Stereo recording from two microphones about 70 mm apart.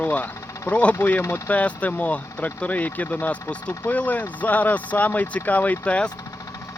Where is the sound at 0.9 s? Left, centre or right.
Left.